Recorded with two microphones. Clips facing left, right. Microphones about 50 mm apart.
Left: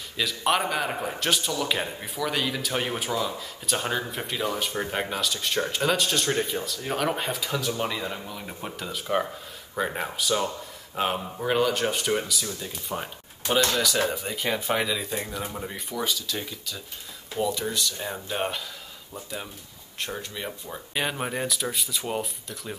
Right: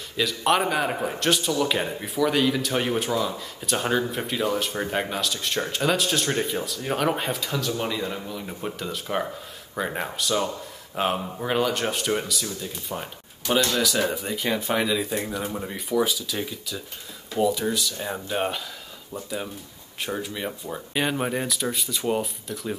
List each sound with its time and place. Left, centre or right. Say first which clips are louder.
0.2 s a man's voice: right 3 dB; centre